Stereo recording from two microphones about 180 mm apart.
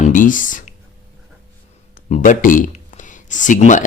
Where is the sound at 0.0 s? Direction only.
45° left (ahead or behind).